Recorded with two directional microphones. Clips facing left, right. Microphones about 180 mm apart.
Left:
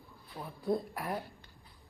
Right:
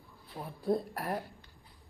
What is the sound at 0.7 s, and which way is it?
Speech, 30° right (ahead or behind).